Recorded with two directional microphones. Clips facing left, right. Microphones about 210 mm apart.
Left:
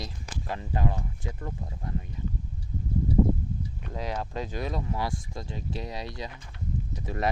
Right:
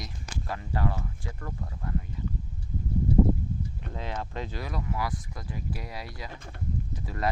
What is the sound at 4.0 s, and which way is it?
Speech, 15° left (ahead or behind).